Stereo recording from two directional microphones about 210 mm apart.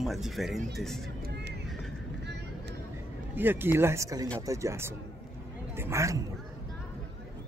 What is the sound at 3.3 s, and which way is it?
Speech, 10° right (ahead or behind).